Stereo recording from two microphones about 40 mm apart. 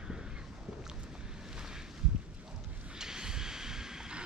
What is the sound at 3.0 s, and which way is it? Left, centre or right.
Vehicle, centre.